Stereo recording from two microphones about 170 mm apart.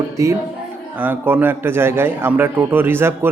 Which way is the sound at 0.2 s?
20° right (ahead or behind).